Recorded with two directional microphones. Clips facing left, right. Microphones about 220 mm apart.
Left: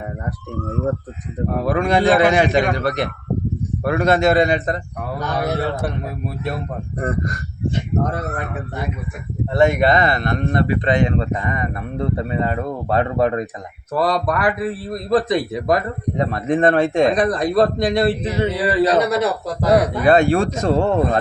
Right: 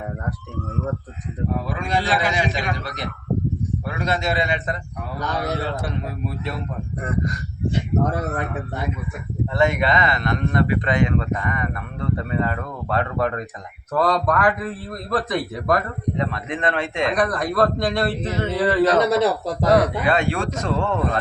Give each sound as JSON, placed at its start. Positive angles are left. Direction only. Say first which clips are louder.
{"t": 1.5, "sound": "a man's voice", "louder": "left 8 dB", "side_deg": 60}
{"t": 5.4, "sound": "a man's voice", "louder": "left 5 dB", "side_deg": 60}
{"t": 9.5, "sound": "speech", "louder": "left 5 dB", "side_deg": 35}
{"t": 10.5, "sound": "speech", "louder": "left 3 dB", "side_deg": 30}
{"t": 13.9, "sound": "a man's voice", "louder": "left 1 dB", "side_deg": 10}
{"t": 15.1, "sound": "speech", "louder": "left 6 dB", "side_deg": 20}
{"t": 16.1, "sound": "speech", "louder": "left 10 dB", "side_deg": 45}
{"t": 17.2, "sound": "a man's voice", "louder": "left 4 dB", "side_deg": 25}
{"t": 20.1, "sound": "speech", "louder": "left 7 dB", "side_deg": 40}